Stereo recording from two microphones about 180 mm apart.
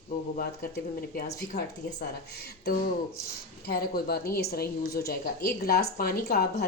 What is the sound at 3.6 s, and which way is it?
A woman's voice, 55° left (ahead or behind).